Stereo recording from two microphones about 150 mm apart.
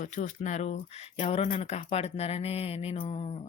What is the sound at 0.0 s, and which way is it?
Speech, 60° left (ahead or behind).